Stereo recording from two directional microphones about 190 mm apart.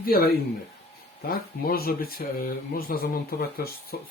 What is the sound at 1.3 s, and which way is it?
Speech, 55° left (ahead or behind).